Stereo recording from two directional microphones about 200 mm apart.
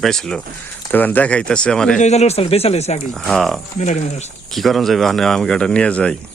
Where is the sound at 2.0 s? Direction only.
35° left (ahead or behind).